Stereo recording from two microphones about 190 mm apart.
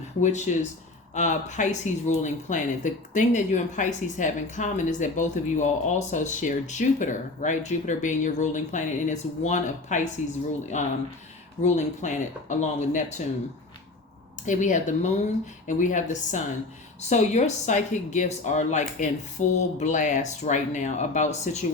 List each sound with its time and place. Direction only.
0.2 s speech: 40° left (ahead or behind)
14.4 s speech: 40° left (ahead or behind)